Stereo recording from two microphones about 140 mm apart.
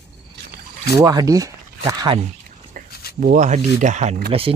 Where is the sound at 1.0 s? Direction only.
25° right (ahead or behind).